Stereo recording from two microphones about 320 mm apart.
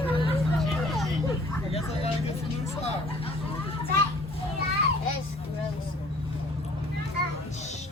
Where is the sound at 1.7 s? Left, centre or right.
Centre.